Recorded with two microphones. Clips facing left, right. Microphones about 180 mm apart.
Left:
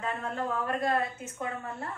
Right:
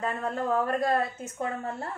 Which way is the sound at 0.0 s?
40° right (ahead or behind).